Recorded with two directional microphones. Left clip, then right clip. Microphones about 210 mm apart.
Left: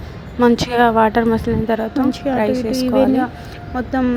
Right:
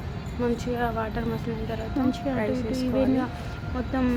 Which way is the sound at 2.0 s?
25° left (ahead or behind).